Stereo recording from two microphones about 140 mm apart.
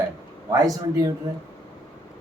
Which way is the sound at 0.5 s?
25° right (ahead or behind).